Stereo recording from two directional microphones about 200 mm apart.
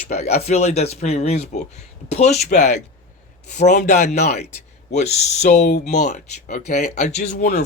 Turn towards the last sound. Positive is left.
turn(degrees=40)  # may be behind; listen again after turning